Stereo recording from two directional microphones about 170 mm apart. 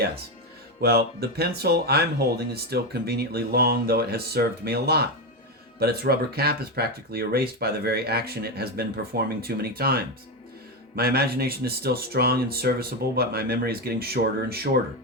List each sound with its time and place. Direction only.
0.8 s speech: 65° right (ahead or behind)